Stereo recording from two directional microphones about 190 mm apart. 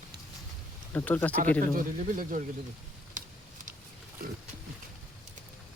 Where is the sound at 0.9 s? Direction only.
10° left (ahead or behind).